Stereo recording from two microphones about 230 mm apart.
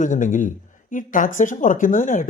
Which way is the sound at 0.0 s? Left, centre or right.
Left.